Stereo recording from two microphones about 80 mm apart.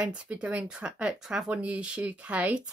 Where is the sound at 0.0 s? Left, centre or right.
Centre.